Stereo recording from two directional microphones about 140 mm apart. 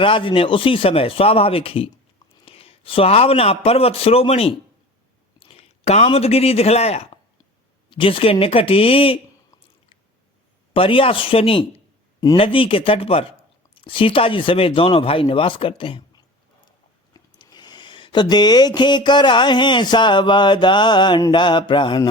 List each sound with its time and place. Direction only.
0.0 s speech: 35° left (ahead or behind)
10.8 s speech: 40° left (ahead or behind)
17.2 s a sound: 30° left (ahead or behind)